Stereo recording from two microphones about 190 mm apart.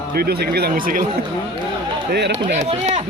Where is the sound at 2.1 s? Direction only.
65° right (ahead or behind).